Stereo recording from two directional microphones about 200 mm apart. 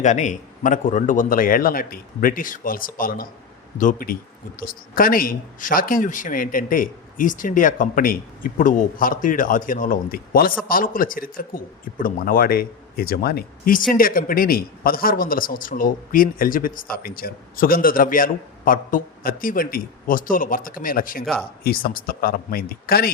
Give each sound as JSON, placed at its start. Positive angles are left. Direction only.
{"t": 0.0, "sound": "a man's voice", "side_deg": 35}